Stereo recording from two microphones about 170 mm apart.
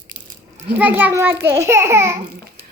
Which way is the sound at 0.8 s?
10° right (ahead or behind).